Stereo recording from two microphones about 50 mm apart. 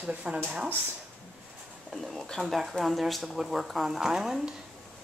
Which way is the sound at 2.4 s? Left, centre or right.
Centre.